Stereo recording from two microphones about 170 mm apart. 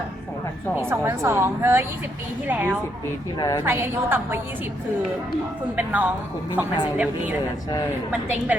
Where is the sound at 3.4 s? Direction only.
20° left (ahead or behind).